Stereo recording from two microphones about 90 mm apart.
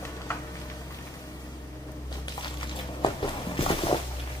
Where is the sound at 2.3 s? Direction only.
60° left (ahead or behind); by 3.9 s 80° left.